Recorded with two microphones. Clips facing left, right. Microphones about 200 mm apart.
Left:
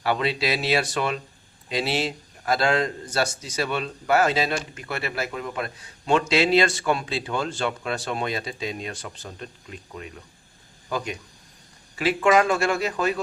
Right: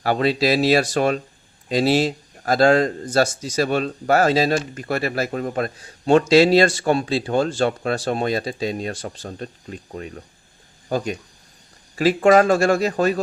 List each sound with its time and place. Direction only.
0.0 s speech: 40° right (ahead or behind)